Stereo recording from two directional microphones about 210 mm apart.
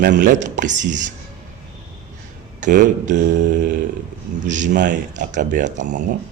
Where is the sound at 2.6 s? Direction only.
35° right (ahead or behind).